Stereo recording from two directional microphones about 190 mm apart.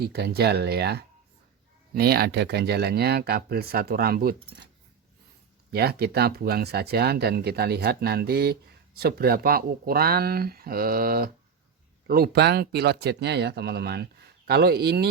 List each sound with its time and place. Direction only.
0.0 s speech: 55° right (ahead or behind)
5.7 s speech: 55° right (ahead or behind)